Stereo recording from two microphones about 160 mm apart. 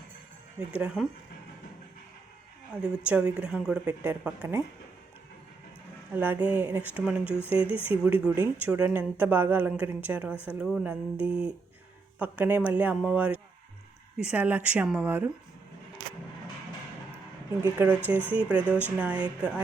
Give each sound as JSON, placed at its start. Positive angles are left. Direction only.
{"t": 0.7, "sound": "speech", "side_deg": -10}
{"t": 2.8, "sound": "speech", "side_deg": -5}
{"t": 6.1, "sound": "speech", "side_deg": -10}
{"t": 7.7, "sound": "speech", "side_deg": 35}
{"t": 8.2, "sound": "speech", "side_deg": -10}
{"t": 17.6, "sound": "speech", "side_deg": -10}